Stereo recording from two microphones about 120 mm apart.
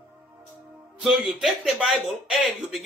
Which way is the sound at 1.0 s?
Centre (ahead or behind).